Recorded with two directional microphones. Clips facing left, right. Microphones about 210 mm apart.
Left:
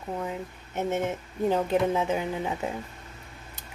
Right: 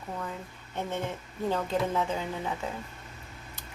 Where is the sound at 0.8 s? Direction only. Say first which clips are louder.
Left 5 dB; 20° left (ahead or behind).